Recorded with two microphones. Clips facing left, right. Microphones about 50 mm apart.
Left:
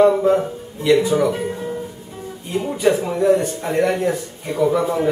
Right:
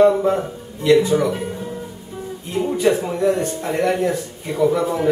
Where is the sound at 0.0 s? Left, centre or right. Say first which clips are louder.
Left 1 dB; centre.